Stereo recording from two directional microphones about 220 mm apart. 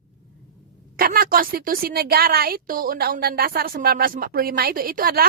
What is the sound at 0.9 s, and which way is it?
A woman's voice, 40° right (ahead or behind).